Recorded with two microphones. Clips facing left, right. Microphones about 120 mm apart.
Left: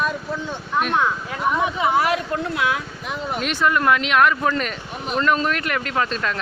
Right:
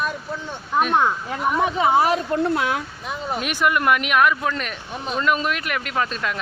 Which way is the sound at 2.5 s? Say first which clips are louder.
Right 1 dB; 40° right (ahead or behind).